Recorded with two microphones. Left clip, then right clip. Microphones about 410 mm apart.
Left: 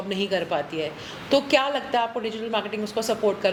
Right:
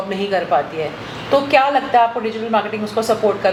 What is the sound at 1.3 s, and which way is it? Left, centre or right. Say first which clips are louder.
A woman's voice: right 7 dB; left.